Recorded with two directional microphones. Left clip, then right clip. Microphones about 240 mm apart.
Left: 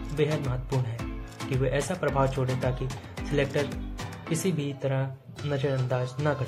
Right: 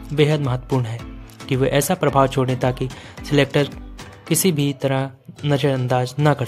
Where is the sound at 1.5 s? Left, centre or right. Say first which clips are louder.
Right 10 dB; right.